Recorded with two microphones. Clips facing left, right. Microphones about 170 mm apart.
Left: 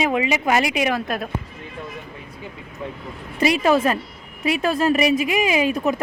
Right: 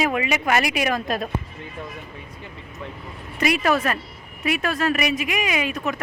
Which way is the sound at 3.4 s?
25° left (ahead or behind).